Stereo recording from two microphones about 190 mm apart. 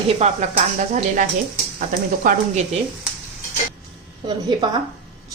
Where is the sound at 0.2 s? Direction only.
35° right (ahead or behind).